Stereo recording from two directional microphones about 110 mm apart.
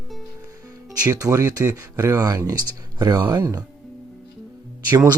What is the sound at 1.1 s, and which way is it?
Speech, 30° right (ahead or behind).